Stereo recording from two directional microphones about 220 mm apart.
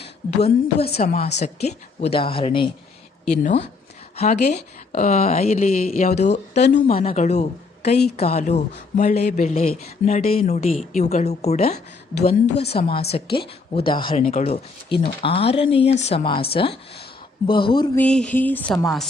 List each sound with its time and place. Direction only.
0.3 s speech: 30° left (ahead or behind)
0.8 s speech: 45° left (ahead or behind)
1.0 s speech: 30° left (ahead or behind)
4.2 s speech: 30° left (ahead or behind)
17.9 s a sound: 5° left (ahead or behind)